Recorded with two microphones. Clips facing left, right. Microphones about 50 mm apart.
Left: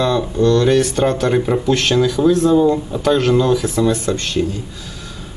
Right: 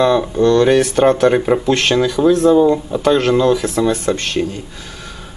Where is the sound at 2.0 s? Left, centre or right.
Centre; by 4.2 s right.